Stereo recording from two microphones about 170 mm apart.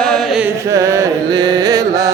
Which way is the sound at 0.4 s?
15° right (ahead or behind).